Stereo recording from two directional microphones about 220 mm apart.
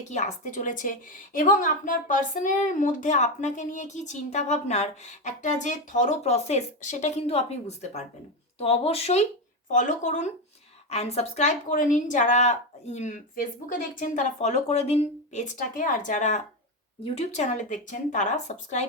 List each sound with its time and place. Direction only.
0.0 s a woman's voice: 35° left (ahead or behind)